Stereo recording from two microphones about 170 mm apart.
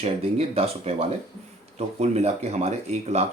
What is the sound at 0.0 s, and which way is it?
Speech, 35° right (ahead or behind).